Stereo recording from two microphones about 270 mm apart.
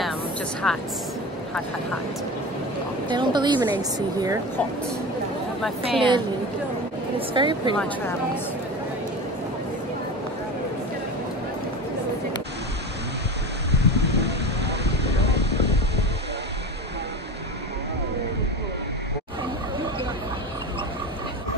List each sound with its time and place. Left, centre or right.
0.6 s speech: centre
3.1 s speech: centre
5.8 s speech: centre
13.7 s a sound: right